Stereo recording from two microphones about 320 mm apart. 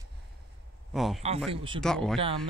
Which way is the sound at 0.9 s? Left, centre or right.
Centre.